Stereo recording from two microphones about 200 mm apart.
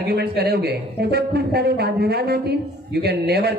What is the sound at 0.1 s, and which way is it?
A man's voice, 55° right (ahead or behind).